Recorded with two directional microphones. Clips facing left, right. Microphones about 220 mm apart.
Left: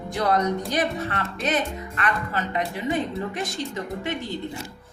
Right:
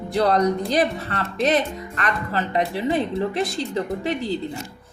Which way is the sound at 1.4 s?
35° right (ahead or behind).